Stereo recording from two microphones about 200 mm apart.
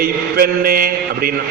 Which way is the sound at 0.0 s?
50° right (ahead or behind).